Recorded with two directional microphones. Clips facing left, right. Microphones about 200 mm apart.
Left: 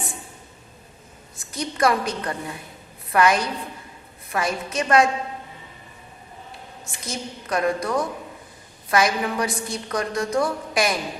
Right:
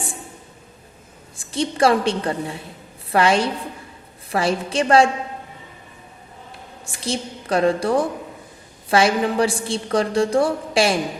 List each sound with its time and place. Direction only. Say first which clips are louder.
1.4 s a woman's voice: right 4 dB; 30° right (ahead or behind)
7.0 s a woman's voice: right 6 dB; 30° right (ahead or behind)